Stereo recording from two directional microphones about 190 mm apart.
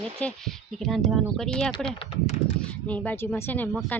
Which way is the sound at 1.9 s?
30° left (ahead or behind).